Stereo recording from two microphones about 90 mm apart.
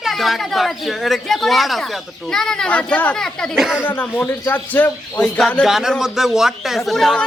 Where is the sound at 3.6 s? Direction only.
5° right (ahead or behind).